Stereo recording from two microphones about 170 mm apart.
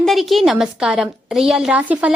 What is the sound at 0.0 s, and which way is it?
A woman's voice, centre (ahead or behind).